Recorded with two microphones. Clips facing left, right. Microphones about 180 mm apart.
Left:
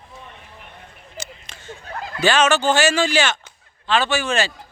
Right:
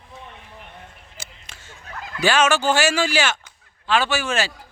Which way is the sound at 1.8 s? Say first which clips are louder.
Left 4 dB; 35° left (ahead or behind).